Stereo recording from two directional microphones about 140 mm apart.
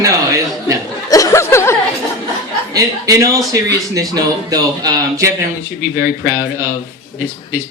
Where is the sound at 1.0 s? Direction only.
25° left (ahead or behind).